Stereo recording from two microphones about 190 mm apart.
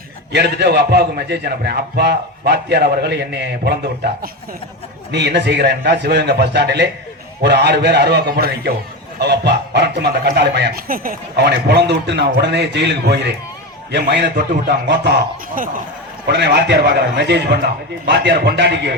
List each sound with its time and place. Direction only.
0.3 s speech: 60° right (ahead or behind)